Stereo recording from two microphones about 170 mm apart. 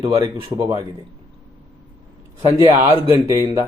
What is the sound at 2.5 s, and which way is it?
Speech, 20° right (ahead or behind).